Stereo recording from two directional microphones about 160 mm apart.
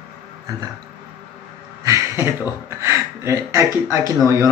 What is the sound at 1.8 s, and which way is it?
Speech, 15° right (ahead or behind).